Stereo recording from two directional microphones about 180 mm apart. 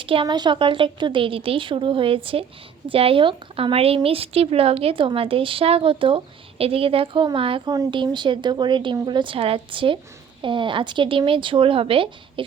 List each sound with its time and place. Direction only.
0.0 s a woman's voice: 30° right (ahead or behind)